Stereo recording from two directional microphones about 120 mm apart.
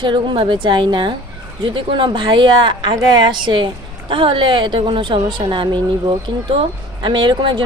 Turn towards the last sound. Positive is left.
turn(degrees=-40)  # may be behind; listen again after turning